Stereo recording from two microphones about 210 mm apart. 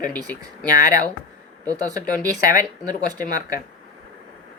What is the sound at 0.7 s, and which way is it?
Speech, 15° right (ahead or behind).